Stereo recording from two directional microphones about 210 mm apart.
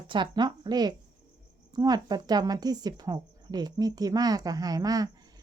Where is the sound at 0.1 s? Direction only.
20° right (ahead or behind).